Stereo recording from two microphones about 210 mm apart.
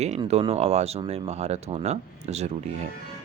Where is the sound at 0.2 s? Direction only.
30° right (ahead or behind).